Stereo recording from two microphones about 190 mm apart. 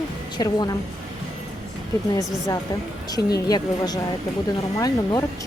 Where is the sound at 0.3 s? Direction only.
20° left (ahead or behind).